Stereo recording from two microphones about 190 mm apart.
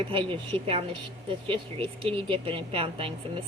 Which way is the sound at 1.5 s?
30° right (ahead or behind).